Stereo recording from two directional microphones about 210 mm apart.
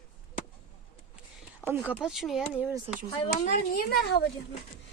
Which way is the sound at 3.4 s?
45° left (ahead or behind).